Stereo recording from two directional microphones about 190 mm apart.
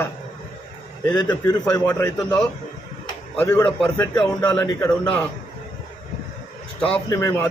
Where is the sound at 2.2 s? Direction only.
5° left (ahead or behind).